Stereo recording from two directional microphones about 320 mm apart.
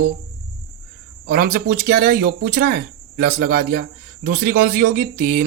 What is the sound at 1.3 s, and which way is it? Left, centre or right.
Speech, right.